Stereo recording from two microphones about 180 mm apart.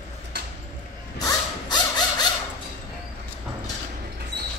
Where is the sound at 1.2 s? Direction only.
20° left (ahead or behind).